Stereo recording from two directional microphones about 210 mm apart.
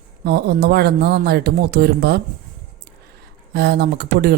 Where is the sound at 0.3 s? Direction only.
50° right (ahead or behind).